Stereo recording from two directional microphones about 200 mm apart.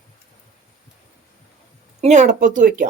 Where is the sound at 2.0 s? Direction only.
35° right (ahead or behind).